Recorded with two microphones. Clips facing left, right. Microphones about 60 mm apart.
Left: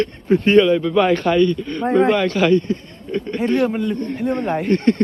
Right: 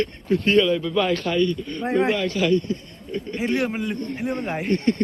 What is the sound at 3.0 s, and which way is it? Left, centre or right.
Speech, left.